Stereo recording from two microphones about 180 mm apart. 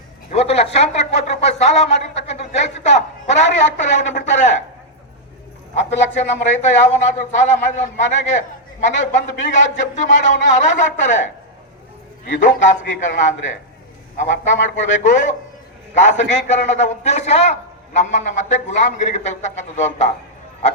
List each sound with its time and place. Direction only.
0.3 s speech: 35° left (ahead or behind)
5.9 s a man's voice: 40° left (ahead or behind)
12.3 s a man's voice: 45° left (ahead or behind)